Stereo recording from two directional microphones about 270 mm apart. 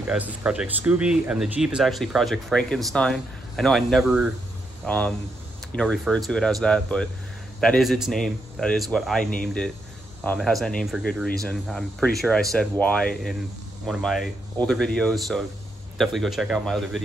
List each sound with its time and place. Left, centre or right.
0.0 s speech: centre